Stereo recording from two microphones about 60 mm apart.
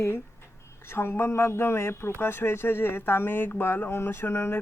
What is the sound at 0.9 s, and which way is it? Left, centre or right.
Speech, left.